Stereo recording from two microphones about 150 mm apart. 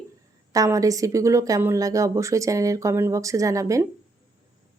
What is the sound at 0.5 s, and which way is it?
A woman's voice, 25° right (ahead or behind).